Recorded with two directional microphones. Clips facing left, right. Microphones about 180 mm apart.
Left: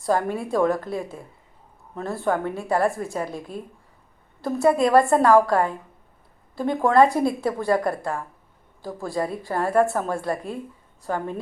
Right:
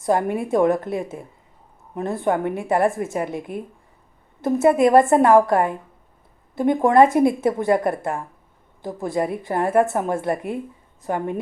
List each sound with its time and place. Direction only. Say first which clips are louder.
0.0 s a woman's voice: right 3 dB; 20° right (ahead or behind)